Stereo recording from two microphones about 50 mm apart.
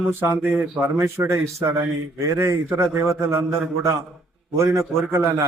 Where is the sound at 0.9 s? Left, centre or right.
Right.